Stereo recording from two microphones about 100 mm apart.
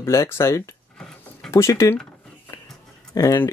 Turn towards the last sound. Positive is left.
turn(degrees=25)  # may be behind; listen again after turning